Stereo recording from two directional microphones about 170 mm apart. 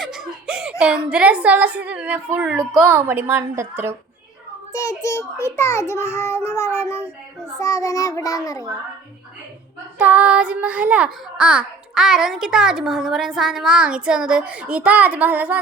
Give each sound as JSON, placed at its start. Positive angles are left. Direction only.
{"t": 0.0, "sound": "a child's voice", "side_deg": 0}
{"t": 4.7, "sound": "a child's voice", "side_deg": 15}
{"t": 7.6, "sound": "child singing", "side_deg": 20}
{"t": 10.0, "sound": "a child's voice", "side_deg": -10}